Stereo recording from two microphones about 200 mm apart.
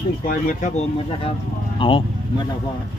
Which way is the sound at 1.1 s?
30° left (ahead or behind).